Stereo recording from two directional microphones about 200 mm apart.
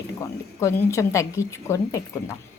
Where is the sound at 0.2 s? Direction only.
15° left (ahead or behind).